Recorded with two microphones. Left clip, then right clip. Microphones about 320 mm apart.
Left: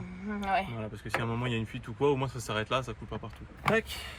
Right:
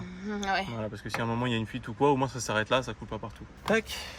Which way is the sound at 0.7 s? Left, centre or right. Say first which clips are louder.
Right 1 dB; right.